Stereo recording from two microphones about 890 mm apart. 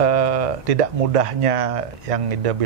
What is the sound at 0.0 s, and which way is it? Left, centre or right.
Speech, right.